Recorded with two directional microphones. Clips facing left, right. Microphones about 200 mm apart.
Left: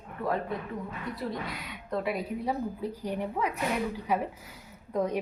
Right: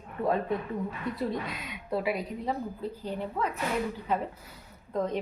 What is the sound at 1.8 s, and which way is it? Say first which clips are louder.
Speech: right 1 dB; 5° right (ahead or behind).